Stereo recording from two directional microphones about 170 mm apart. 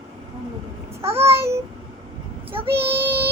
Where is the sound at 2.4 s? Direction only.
30° right (ahead or behind).